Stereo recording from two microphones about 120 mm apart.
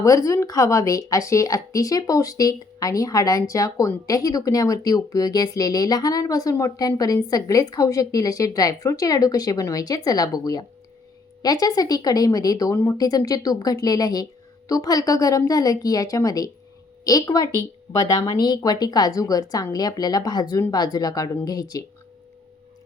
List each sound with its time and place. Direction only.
0.0 s a woman's voice: 25° left (ahead or behind)